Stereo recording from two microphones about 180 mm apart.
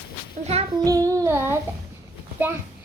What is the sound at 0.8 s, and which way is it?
Child singing, 20° right (ahead or behind).